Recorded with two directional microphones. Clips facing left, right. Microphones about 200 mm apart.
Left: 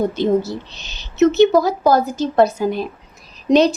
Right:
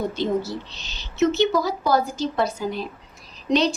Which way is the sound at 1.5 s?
45° left (ahead or behind).